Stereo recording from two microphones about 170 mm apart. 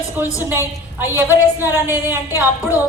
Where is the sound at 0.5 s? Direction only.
15° right (ahead or behind).